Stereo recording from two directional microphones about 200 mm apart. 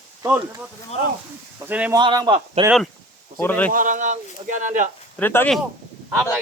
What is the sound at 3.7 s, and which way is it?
Speech, 40° right (ahead or behind).